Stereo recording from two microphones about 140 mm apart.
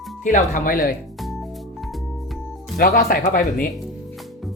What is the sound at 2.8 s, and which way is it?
Speech, 90° left.